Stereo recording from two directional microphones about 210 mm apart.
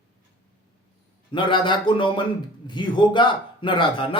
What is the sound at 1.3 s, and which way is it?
A man's voice, 25° left (ahead or behind).